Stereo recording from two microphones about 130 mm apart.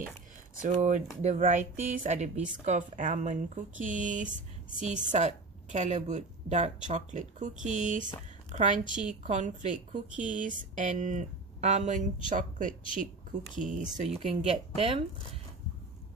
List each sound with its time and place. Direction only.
0.6 s a woman's voice: 70° right (ahead or behind)
10.2 s speech: 85° right; by 12.0 s 65° right (ahead or behind)
12.3 s a woman's voice: 85° right
14.3 s speech: 50° right (ahead or behind)